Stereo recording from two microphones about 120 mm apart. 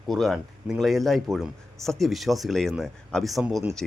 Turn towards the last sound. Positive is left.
turn(degrees=-5)  # may be behind; listen again after turning